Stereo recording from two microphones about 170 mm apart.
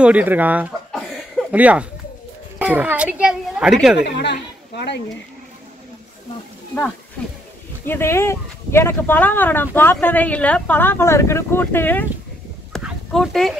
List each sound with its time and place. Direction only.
0.0 s a child's voice: 10° right (ahead or behind)
4.0 s speech: 85° left
7.8 s speech: 15° left (ahead or behind)
12.7 s a sound: centre (ahead or behind)